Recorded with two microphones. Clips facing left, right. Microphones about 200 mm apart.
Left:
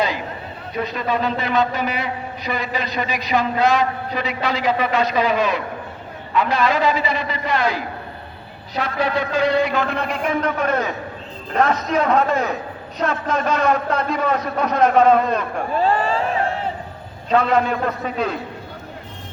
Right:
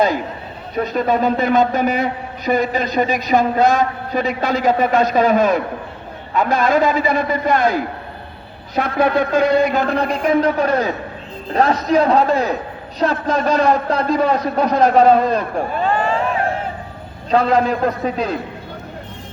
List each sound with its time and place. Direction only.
0.8 s a man's voice: 45° right (ahead or behind)
15.8 s vehicle: 35° left (ahead or behind)
17.2 s a man's voice: 35° right (ahead or behind)